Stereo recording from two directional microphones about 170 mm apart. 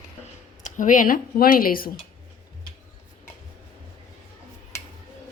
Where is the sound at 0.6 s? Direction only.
50° left (ahead or behind).